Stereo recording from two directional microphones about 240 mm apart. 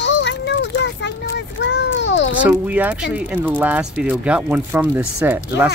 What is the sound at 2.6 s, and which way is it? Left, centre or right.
Speech, centre.